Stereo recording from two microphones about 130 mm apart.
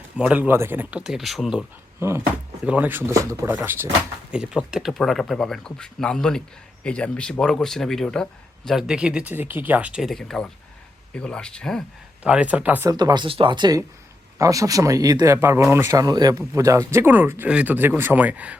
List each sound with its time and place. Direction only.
0.2 s speech: 10° right (ahead or behind)
2.0 s speech: 20° right (ahead or behind)
3.1 s speech: 25° right (ahead or behind)
4.3 s speech: 5° right (ahead or behind)
12.2 s speech: 10° right (ahead or behind)
12.9 s speech: 30° right (ahead or behind); by 18.5 s 10° right (ahead or behind)